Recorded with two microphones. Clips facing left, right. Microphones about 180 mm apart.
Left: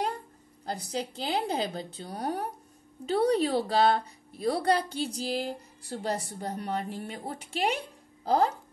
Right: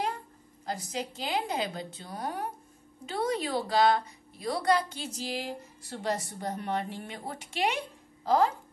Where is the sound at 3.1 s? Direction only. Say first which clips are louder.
Left 6 dB; 35° left (ahead or behind).